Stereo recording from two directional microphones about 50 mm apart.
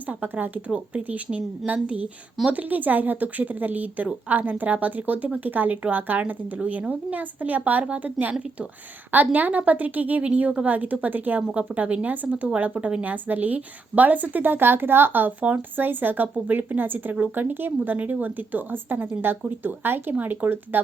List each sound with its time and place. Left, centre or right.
0.1 s speech: right
0.7 s speech: right